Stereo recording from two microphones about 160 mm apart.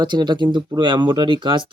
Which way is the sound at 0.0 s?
25° right (ahead or behind).